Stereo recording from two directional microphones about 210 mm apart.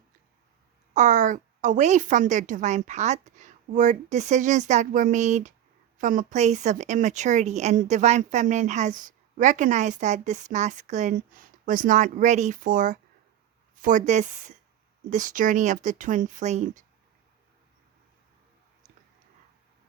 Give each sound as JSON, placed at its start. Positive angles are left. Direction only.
{"t": 0.9, "sound": "a woman's voice", "side_deg": -35}